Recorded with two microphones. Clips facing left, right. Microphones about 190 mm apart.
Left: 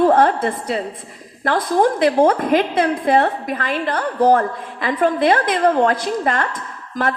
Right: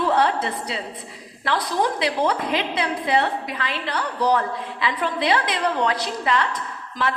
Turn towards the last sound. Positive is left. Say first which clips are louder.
# left 4 dB
turn(degrees=50)  # may be behind; listen again after turning